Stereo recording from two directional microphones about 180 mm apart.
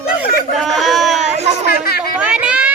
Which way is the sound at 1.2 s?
40° right (ahead or behind).